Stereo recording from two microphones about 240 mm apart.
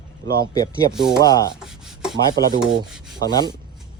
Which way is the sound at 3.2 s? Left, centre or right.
Centre.